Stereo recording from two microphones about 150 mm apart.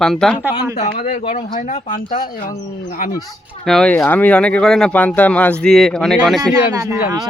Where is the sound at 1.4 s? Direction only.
55° left (ahead or behind); by 2.4 s 75° left (ahead or behind).